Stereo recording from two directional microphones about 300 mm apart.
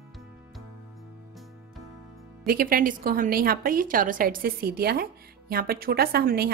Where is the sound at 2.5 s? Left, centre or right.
Right.